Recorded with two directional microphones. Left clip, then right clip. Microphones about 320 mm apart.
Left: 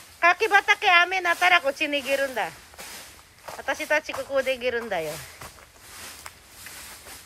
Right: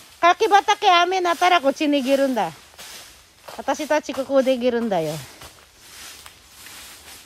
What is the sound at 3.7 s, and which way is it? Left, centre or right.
Speech, centre.